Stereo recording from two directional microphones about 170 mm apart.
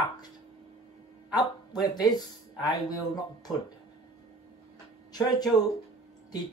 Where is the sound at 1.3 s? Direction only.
25° left (ahead or behind).